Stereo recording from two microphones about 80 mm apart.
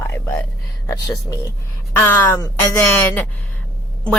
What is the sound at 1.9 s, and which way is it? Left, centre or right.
Speech, left.